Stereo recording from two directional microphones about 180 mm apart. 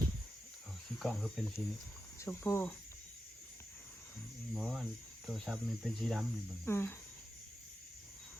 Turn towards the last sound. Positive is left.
turn(degrees=15)  # may be behind; listen again after turning